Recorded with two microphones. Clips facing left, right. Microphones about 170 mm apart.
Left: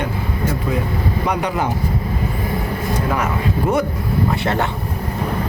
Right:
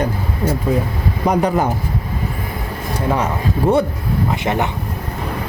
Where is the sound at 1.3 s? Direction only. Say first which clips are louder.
Right 7 dB; 45° right (ahead or behind).